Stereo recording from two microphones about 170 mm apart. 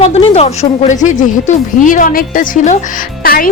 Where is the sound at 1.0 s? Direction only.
50° left (ahead or behind).